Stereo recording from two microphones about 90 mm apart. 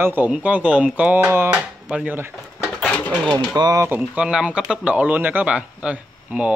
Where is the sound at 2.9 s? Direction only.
15° left (ahead or behind).